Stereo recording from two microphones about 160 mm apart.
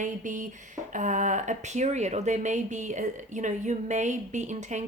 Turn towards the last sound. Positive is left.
turn(degrees=-50)  # may be behind; listen again after turning